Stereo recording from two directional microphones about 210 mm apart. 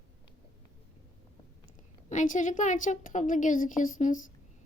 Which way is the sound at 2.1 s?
35° left (ahead or behind).